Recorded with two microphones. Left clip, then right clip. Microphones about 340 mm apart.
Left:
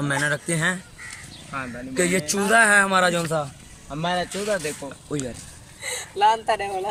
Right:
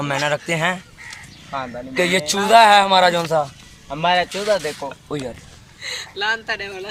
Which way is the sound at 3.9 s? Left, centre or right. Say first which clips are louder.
Right 8 dB; right.